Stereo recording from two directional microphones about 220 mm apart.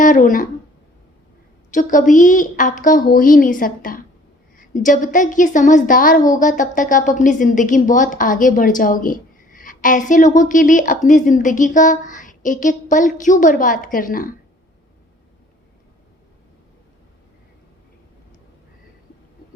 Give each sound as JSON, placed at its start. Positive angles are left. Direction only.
{"t": 0.0, "sound": "speech", "side_deg": 35}
{"t": 1.7, "sound": "a woman's voice", "side_deg": 35}